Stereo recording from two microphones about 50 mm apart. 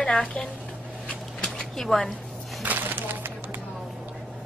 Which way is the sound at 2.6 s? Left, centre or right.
Right.